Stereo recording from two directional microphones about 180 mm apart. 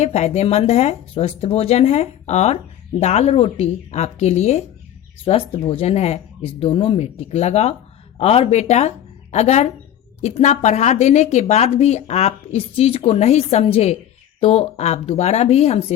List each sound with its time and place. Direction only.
0.0 s speech: 35° left (ahead or behind)